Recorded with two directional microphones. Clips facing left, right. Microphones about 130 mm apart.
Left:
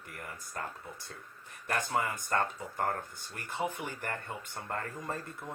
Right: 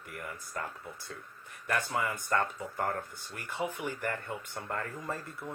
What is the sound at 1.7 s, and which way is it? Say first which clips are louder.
Speech: even; 35° left (ahead or behind).